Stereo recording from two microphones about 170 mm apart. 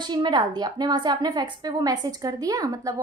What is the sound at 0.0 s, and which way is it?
A woman's voice, 25° right (ahead or behind).